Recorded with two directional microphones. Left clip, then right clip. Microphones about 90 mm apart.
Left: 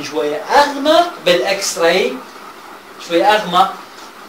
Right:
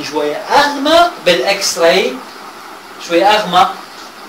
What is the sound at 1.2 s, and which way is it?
Speech, 30° left (ahead or behind).